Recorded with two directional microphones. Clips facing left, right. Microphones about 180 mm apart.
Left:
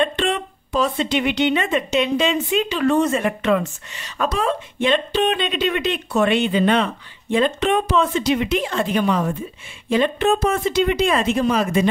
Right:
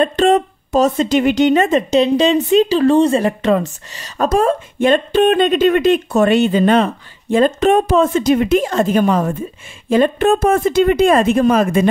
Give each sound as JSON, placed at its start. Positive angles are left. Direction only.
{"t": 0.0, "sound": "a woman's voice", "side_deg": -40}